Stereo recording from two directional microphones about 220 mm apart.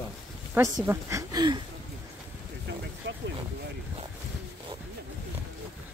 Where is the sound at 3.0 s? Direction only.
55° right (ahead or behind).